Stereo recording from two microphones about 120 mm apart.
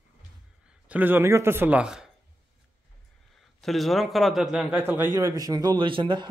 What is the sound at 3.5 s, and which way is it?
A man's voice, centre (ahead or behind).